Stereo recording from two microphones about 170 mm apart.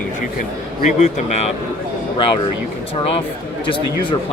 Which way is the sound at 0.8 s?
40° left (ahead or behind).